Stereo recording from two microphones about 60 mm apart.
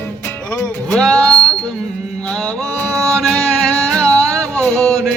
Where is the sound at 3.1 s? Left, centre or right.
Centre.